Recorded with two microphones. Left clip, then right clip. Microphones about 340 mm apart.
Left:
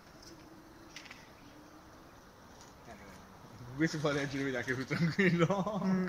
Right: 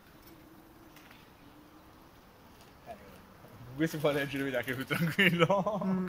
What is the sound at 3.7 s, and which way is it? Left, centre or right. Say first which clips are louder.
A man's voice: right 3 dB; right.